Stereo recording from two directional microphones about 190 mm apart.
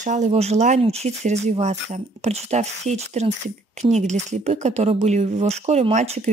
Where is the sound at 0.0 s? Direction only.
40° right (ahead or behind).